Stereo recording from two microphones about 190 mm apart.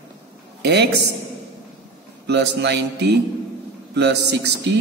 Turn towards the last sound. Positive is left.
turn(degrees=-60)  # may be behind; listen again after turning